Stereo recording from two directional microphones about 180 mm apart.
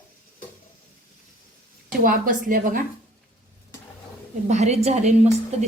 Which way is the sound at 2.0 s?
50° right (ahead or behind).